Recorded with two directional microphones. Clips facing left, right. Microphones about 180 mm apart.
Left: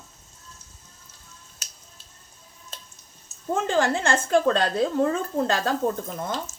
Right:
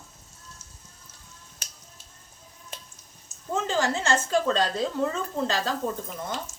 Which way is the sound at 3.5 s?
55° left (ahead or behind).